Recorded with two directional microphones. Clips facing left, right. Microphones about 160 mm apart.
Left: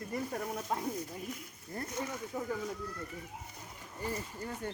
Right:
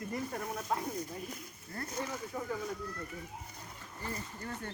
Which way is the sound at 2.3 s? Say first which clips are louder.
Left 2 dB; 10° left (ahead or behind).